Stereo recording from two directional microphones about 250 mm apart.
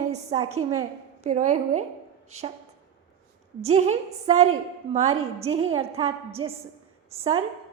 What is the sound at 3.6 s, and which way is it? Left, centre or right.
A woman's voice, right.